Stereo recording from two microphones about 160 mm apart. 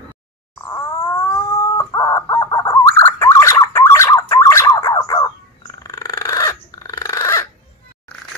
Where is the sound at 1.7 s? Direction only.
20° left (ahead or behind).